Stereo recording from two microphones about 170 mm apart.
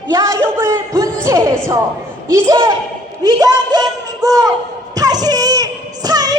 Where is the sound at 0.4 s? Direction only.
15° right (ahead or behind).